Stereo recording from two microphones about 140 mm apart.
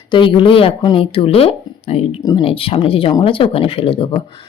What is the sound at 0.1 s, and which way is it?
Speech, 35° left (ahead or behind).